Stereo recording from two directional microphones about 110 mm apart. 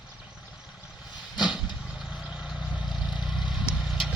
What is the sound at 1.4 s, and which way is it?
Vehicle, 5° right (ahead or behind).